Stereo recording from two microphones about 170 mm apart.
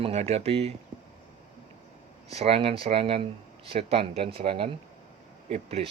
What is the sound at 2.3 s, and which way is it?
Speech, 35° right (ahead or behind).